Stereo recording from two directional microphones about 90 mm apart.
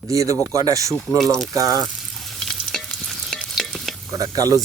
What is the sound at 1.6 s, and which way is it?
Speech, 40° right (ahead or behind).